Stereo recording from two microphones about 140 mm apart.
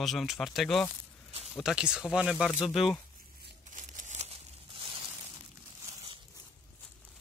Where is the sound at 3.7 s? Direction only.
65° right (ahead or behind).